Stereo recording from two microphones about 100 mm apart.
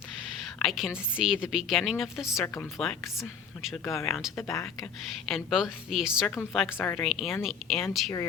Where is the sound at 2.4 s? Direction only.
25° left (ahead or behind).